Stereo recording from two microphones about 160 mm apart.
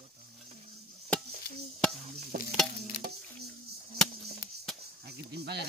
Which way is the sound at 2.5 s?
Centre (ahead or behind).